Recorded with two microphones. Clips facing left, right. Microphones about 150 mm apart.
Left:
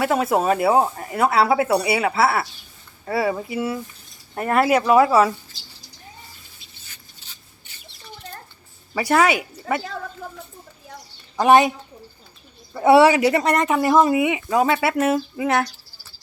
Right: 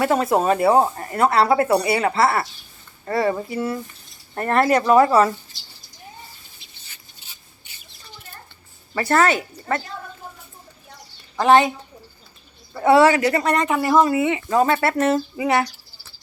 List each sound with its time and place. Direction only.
0.0 s speech: 5° left (ahead or behind)
9.0 s speech: 10° left (ahead or behind)
11.3 s speech: 15° left (ahead or behind)
12.7 s speech: 15° left (ahead or behind); by 15.7 s centre (ahead or behind)